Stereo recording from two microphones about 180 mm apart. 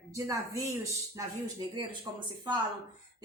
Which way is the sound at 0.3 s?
15° right (ahead or behind).